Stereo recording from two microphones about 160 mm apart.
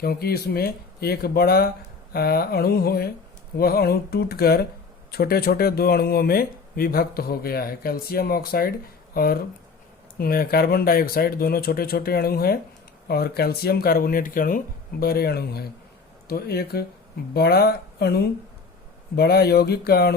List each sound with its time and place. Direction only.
0.0 s speech: 75° left (ahead or behind)